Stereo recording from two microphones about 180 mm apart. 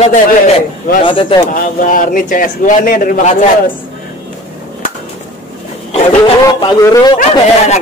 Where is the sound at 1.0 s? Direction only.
30° left (ahead or behind).